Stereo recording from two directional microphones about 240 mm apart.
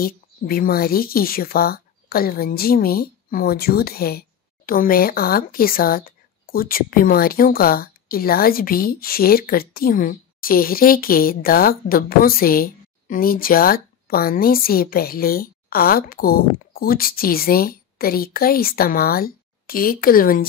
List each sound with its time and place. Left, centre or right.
0.0 s speech: left